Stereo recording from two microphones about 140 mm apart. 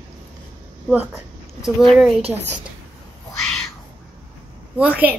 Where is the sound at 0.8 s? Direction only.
10° right (ahead or behind).